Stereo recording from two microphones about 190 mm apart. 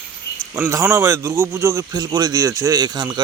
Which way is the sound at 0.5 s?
15° right (ahead or behind).